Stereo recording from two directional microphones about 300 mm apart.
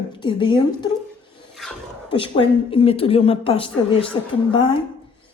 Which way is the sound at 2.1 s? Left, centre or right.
Centre.